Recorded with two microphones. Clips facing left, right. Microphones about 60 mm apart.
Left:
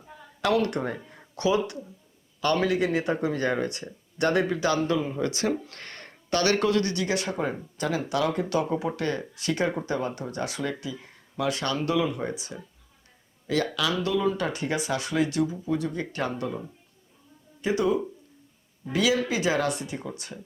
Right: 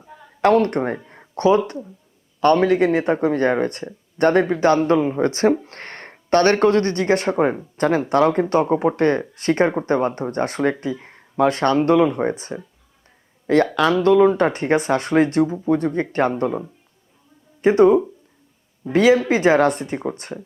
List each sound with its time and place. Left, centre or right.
0.4 s speech: right
0.9 s speech: right
13.7 s speech: right